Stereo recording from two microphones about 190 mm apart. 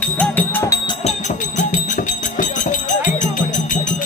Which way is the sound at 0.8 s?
35° left (ahead or behind).